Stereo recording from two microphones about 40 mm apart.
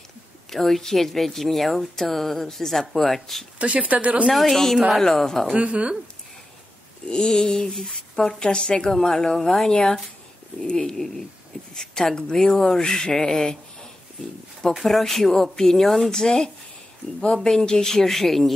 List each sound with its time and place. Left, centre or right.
0.5 s speech: centre
3.5 s speech: right
4.3 s speech: centre
5.6 s speech: right
7.1 s speech: centre
7.7 s speech: centre
8.4 s a woman's voice: centre
9.7 s a woman's voice: left
14.8 s speech: centre